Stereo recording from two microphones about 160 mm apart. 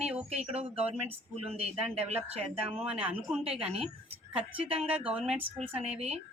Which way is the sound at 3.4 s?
40° right (ahead or behind).